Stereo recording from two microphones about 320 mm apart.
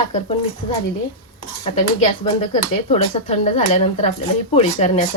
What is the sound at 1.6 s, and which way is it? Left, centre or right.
Speech, centre.